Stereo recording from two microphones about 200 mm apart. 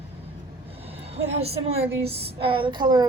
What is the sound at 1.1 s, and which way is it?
A woman's voice, 30° right (ahead or behind).